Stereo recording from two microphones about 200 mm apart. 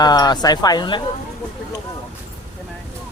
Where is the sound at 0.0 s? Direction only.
20° left (ahead or behind).